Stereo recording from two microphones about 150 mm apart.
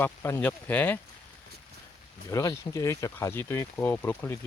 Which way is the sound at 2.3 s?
20° left (ahead or behind).